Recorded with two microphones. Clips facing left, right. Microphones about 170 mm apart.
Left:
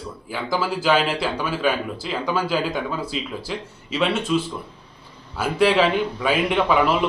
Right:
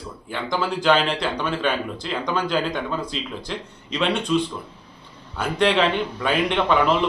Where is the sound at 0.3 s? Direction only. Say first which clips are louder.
Left 1 dB; 5° left (ahead or behind).